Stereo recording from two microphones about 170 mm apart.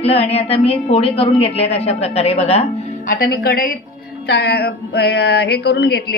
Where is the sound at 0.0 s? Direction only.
35° left (ahead or behind).